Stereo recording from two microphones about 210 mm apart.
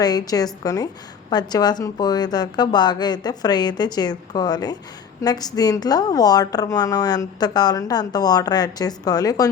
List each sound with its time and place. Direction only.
0.0 s a woman's voice: 20° left (ahead or behind)